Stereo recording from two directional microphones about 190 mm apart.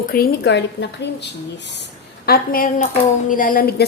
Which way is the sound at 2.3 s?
50° left (ahead or behind).